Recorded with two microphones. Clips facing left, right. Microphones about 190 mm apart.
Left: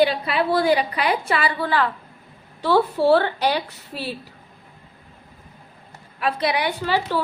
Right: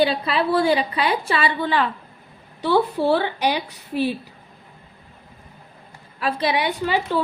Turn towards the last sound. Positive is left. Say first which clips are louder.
# right 1 dB
turn(degrees=-20)  # may be behind; listen again after turning